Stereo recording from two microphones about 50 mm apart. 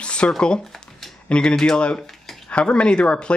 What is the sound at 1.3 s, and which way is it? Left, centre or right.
Speech, centre.